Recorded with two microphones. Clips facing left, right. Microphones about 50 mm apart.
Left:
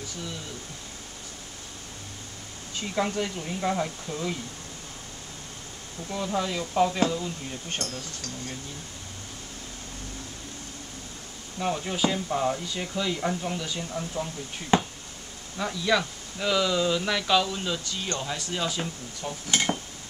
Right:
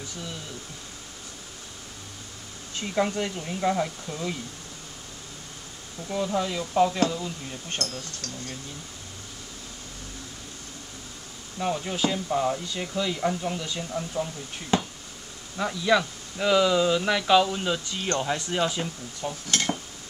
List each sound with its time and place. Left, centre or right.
2.7 s speech: centre
6.0 s speech: centre
11.6 s speech: centre
14.7 s speech: left
15.5 s speech: centre
19.4 s dishes: centre